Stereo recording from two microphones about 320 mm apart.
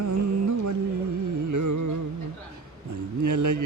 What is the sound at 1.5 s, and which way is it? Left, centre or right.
Carnatic music, right.